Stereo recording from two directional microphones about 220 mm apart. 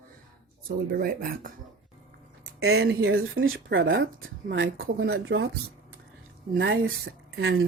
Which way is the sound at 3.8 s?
45° right (ahead or behind).